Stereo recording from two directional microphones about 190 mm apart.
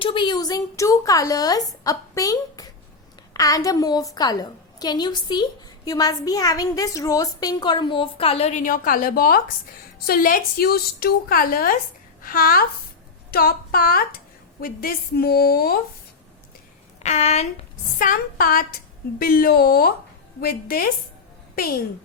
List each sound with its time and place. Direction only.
0.0 s a woman's voice: 25° left (ahead or behind); by 15.8 s 55° left (ahead or behind)
17.0 s a woman's voice: 35° left (ahead or behind)
18.0 s a woman's voice: 45° left (ahead or behind)